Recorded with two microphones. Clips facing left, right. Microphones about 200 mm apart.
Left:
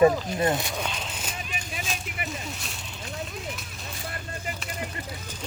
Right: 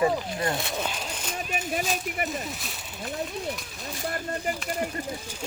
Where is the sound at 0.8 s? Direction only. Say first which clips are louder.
Right 1 dB; 5° right (ahead or behind).